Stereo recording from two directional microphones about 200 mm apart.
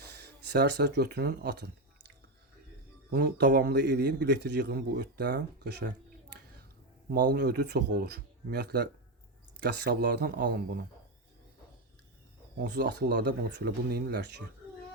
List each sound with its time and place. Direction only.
0.2 s speech: 55° right (ahead or behind)
3.1 s a man's voice: 50° right (ahead or behind)
7.1 s a man's voice: 55° right (ahead or behind)
12.5 s a man's voice: 55° right (ahead or behind)